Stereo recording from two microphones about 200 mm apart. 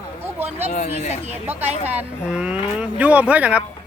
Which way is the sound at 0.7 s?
35° left (ahead or behind).